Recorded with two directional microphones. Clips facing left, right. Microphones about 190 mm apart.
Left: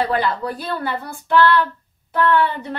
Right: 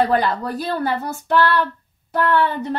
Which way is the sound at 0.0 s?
45° right (ahead or behind).